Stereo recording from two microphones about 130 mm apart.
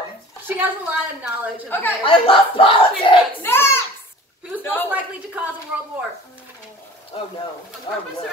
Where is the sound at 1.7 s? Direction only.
15° left (ahead or behind).